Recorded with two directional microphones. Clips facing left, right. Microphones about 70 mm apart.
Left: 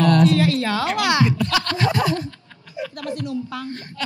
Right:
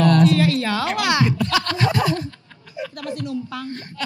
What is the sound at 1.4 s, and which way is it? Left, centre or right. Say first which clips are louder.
Scratch: even; right.